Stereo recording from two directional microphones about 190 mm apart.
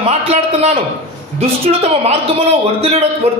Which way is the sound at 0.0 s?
30° right (ahead or behind).